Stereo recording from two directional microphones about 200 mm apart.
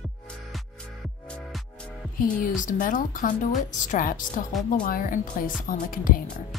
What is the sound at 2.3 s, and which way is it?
A woman's voice, 40° left (ahead or behind).